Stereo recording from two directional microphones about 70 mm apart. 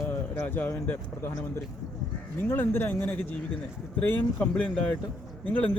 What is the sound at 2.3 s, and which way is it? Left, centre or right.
Speech, left.